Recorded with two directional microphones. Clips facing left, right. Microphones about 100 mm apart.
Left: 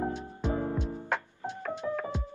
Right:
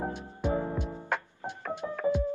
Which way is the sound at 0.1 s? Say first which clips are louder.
Right 2 dB; 15° right (ahead or behind).